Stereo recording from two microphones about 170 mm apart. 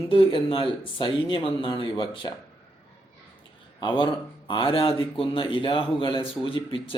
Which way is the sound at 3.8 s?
30° left (ahead or behind).